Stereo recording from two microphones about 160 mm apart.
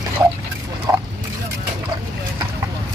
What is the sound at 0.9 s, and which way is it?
Speech, 20° right (ahead or behind).